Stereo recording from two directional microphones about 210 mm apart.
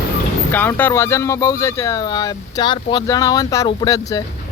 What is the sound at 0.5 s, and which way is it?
Speech, 10° left (ahead or behind).